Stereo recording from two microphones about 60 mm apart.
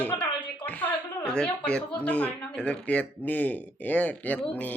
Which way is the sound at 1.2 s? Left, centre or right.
Centre.